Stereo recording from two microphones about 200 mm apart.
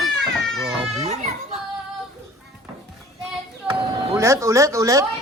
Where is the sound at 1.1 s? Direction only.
35° right (ahead or behind).